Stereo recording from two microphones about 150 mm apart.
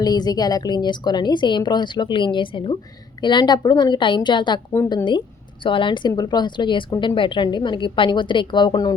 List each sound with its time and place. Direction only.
0.0 s a woman's voice: 25° left (ahead or behind)
5.6 s a woman's voice: 35° left (ahead or behind)